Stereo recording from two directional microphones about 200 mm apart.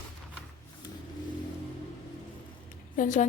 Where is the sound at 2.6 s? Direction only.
40° left (ahead or behind).